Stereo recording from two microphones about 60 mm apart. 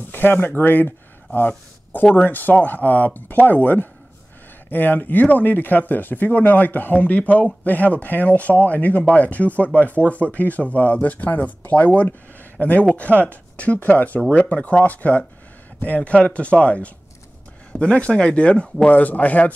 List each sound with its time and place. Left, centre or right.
0.1 s a man's voice: left